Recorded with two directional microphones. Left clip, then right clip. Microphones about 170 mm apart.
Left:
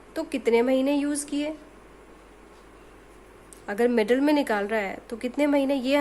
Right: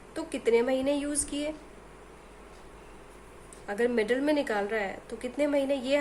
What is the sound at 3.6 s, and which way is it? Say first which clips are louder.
A woman's voice: left 5 dB; 45° left (ahead or behind).